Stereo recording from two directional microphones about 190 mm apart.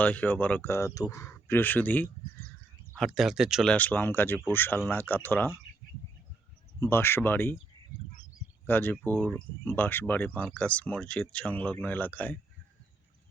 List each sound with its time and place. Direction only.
0.0 s speech: 10° left (ahead or behind)
6.7 s speech: 15° left (ahead or behind)
8.6 s speech: 10° left (ahead or behind)